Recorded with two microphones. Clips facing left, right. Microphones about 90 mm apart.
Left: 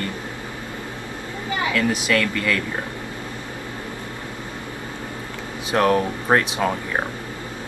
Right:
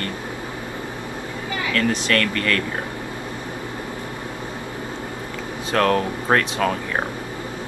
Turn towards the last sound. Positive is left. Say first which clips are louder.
# right 1 dB
turn(degrees=20)  # may be behind; listen again after turning